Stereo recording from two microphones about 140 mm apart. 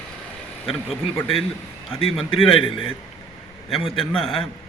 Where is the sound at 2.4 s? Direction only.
40° left (ahead or behind).